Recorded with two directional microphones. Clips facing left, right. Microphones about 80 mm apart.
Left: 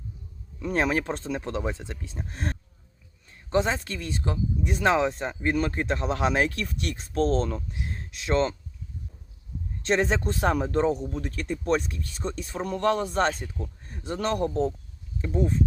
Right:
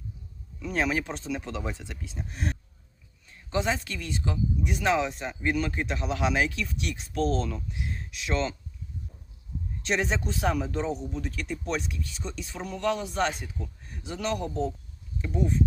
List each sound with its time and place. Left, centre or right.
0.6 s speech: left
9.8 s speech: left